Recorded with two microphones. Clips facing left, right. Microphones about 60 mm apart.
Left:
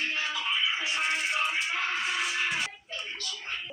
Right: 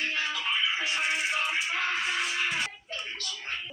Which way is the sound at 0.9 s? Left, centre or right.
Centre.